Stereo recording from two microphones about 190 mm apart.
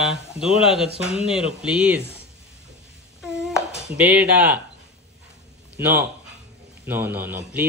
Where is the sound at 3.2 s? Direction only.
Centre (ahead or behind).